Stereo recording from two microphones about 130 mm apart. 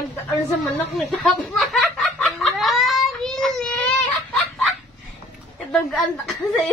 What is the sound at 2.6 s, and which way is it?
Baby cry, centre (ahead or behind).